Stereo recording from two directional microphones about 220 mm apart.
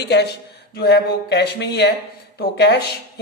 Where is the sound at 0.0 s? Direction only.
50° left (ahead or behind).